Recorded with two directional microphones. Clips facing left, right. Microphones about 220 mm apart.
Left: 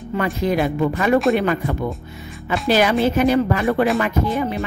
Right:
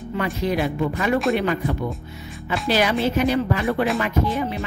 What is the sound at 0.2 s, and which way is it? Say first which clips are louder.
Speech: left 3 dB; 50° left (ahead or behind).